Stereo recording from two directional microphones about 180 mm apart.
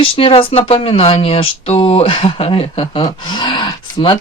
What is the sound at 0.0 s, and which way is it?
Speech, 30° left (ahead or behind).